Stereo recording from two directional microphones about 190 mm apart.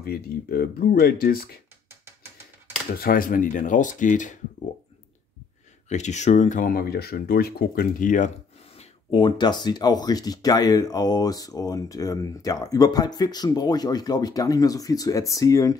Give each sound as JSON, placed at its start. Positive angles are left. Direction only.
{"t": 0.0, "sound": "speech", "side_deg": 55}
{"t": 3.0, "sound": "speech", "side_deg": 50}
{"t": 5.9, "sound": "speech", "side_deg": 40}
{"t": 8.7, "sound": "speech", "side_deg": 25}